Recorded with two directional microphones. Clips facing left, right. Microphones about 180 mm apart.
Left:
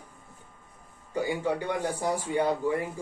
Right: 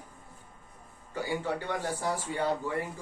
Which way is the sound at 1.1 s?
15° left (ahead or behind).